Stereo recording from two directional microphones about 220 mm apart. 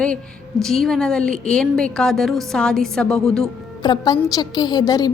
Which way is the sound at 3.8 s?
20° left (ahead or behind).